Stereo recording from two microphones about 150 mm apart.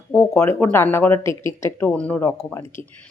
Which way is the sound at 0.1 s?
15° left (ahead or behind).